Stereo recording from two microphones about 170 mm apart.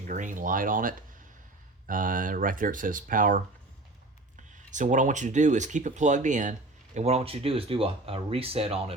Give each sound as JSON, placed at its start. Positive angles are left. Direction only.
{"t": 0.1, "sound": "speech", "side_deg": -50}
{"t": 4.7, "sound": "speech", "side_deg": -45}